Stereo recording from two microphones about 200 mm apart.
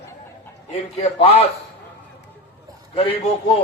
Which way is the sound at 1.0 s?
30° left (ahead or behind).